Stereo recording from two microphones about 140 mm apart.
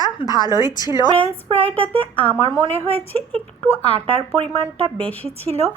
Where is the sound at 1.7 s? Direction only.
40° right (ahead or behind).